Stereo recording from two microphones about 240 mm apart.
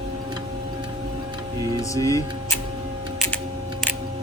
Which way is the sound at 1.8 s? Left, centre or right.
Centre.